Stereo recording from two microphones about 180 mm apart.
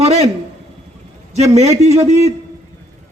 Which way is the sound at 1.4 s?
35° right (ahead or behind).